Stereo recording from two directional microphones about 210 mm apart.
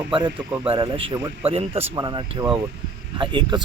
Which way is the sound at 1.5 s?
25° right (ahead or behind).